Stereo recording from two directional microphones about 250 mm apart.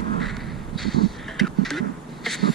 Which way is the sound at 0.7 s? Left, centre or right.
Centre.